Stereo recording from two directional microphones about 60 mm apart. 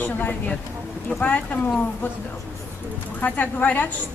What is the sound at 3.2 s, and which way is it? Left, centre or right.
Speech, left.